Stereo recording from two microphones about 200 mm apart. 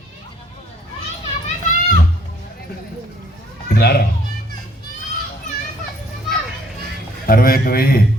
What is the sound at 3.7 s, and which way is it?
Speech, 50° left (ahead or behind).